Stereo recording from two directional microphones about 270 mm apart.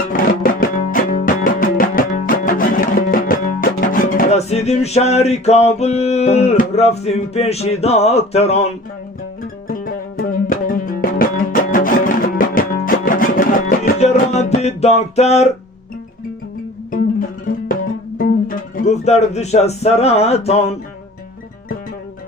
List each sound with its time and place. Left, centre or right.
0.1 s music: left
16.9 s music: left